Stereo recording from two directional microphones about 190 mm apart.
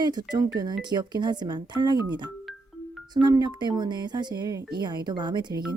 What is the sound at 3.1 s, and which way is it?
Speech, 20° right (ahead or behind).